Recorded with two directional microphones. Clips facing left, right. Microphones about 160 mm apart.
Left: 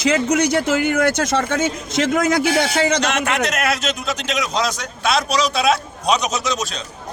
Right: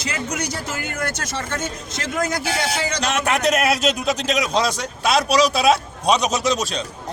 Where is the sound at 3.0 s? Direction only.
35° right (ahead or behind).